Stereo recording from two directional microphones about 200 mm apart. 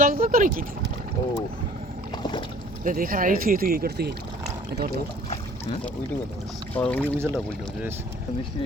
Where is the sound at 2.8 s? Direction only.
45° right (ahead or behind).